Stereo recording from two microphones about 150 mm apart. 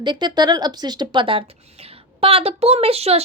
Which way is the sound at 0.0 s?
30° right (ahead or behind).